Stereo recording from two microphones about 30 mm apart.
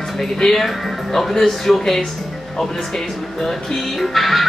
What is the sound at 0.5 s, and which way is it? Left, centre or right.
Speech, centre.